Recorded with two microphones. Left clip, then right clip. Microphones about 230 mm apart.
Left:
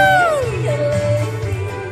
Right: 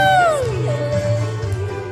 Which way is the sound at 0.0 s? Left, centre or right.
Centre.